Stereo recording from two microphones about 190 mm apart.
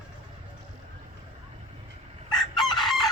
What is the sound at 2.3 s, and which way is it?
Chicken, centre (ahead or behind).